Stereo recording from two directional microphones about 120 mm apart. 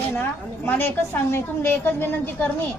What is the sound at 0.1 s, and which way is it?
A woman's voice, 15° left (ahead or behind).